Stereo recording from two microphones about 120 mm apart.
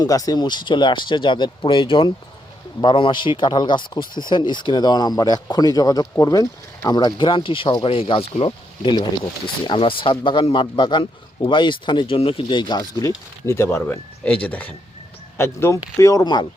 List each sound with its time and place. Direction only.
0.0 s speech: 30° left (ahead or behind)